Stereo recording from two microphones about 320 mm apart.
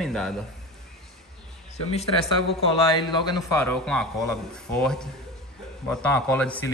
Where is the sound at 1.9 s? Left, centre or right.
Centre.